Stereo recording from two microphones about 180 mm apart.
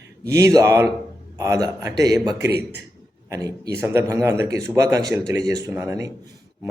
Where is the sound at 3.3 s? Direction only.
20° right (ahead or behind).